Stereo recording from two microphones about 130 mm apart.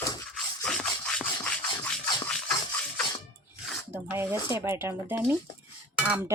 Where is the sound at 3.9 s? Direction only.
15° right (ahead or behind).